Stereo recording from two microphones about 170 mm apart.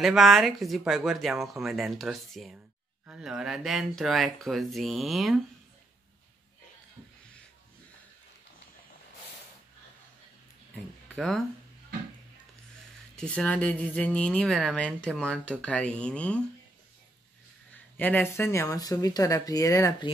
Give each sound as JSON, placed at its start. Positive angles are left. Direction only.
{"t": 0.0, "sound": "speech", "side_deg": 0}
{"t": 11.1, "sound": "speech", "side_deg": 0}
{"t": 13.1, "sound": "speech", "side_deg": 5}
{"t": 17.9, "sound": "speech", "side_deg": 10}